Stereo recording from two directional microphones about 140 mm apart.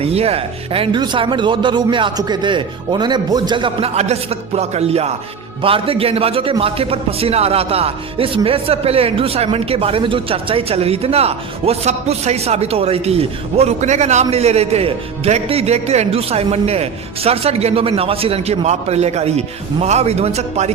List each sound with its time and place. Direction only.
0.0 s speech: 45° right (ahead or behind)